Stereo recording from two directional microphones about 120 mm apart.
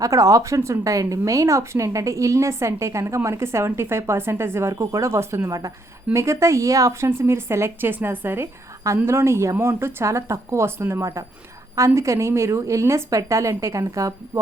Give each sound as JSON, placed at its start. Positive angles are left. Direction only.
{"t": 0.0, "sound": "speech", "side_deg": -25}